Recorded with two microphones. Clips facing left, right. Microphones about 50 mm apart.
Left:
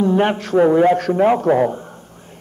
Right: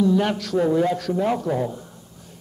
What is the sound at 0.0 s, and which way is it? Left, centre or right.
A man's voice, left.